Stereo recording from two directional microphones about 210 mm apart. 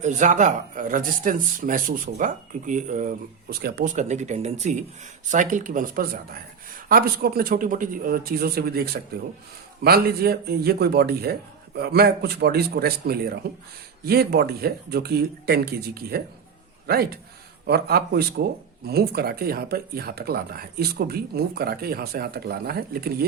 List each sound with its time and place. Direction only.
0.0 s speech: 35° right (ahead or behind)
3.9 s a man's voice: 35° right (ahead or behind)